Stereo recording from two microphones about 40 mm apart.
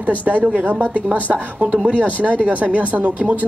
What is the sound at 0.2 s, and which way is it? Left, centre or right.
Speech, right.